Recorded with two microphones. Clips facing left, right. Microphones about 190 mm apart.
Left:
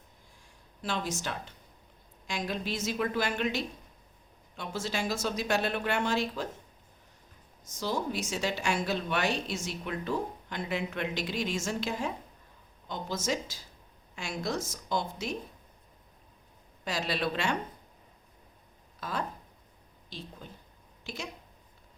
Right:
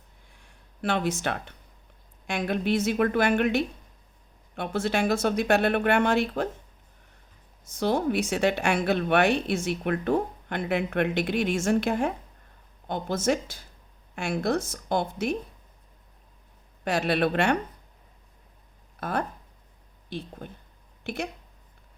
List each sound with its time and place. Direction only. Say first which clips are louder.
0.3 s a sound: right 10 dB; 60° right (ahead or behind)
1.2 s speech: right 7 dB; 60° right (ahead or behind)
7.7 s speech: right 8 dB; 60° right (ahead or behind)
16.8 s speech: right 7 dB; 60° right (ahead or behind)
18.9 s speech: right 6 dB; 55° right (ahead or behind)